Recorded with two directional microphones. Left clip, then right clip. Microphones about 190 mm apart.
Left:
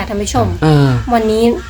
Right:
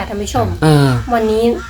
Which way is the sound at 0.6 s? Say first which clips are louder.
Right 3 dB; 10° right (ahead or behind).